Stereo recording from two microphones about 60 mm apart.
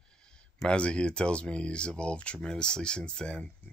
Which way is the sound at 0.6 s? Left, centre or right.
Centre.